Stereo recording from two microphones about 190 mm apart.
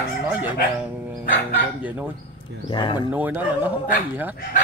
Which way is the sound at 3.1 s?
10° right (ahead or behind).